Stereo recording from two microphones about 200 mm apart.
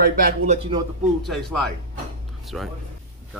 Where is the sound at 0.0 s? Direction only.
45° right (ahead or behind).